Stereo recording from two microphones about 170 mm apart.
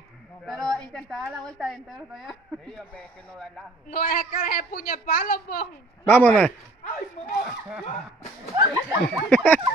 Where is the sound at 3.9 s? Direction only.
60° left (ahead or behind).